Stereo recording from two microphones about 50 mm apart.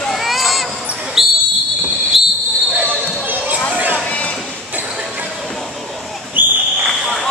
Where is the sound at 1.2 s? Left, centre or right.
Centre.